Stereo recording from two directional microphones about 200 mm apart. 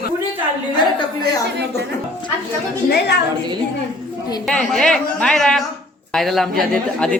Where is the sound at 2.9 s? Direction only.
55° left (ahead or behind).